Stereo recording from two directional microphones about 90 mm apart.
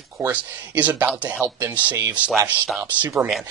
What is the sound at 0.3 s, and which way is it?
Speech, 15° right (ahead or behind).